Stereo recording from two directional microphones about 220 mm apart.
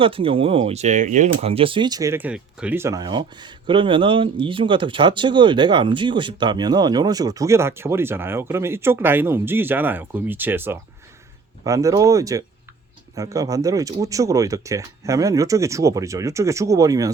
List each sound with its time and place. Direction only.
0.0 s speech: 25° right (ahead or behind)